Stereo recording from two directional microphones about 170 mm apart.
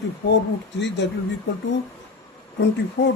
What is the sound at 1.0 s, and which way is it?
Speech, 90° left.